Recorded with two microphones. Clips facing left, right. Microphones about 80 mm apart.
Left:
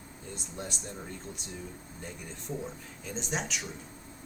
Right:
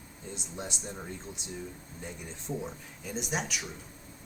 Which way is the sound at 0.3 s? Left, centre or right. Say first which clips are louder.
Even; centre.